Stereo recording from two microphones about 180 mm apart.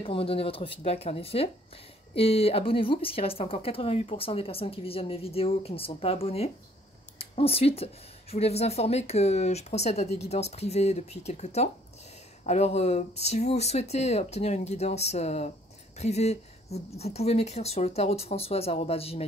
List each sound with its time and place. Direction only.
0.0 s speech: 30° left (ahead or behind)